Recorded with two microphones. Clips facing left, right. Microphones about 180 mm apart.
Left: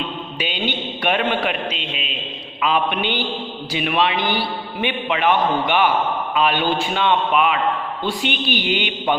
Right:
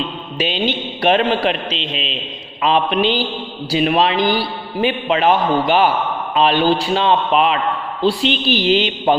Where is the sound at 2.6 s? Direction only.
35° right (ahead or behind).